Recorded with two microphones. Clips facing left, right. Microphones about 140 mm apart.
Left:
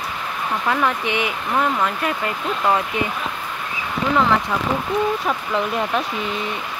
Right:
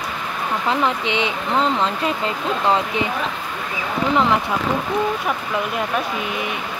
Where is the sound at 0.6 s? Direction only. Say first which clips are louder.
Even; 20° right (ahead or behind).